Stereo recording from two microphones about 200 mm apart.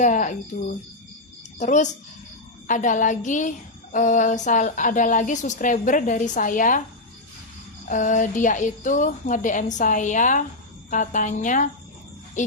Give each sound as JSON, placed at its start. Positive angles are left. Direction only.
{"t": 0.0, "sound": "a woman's voice", "side_deg": 40}
{"t": 1.5, "sound": "a woman's voice", "side_deg": 35}
{"t": 7.9, "sound": "a woman's voice", "side_deg": 40}